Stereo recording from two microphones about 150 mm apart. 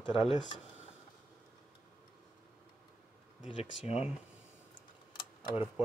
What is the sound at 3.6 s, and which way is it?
Speech, 45° left (ahead or behind).